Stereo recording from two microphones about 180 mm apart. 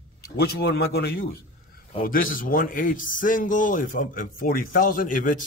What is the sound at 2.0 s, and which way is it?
A man's voice, 50° left (ahead or behind).